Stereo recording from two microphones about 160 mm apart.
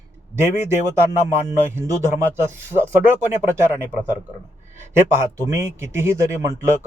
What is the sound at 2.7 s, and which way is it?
Speech, 15° right (ahead or behind).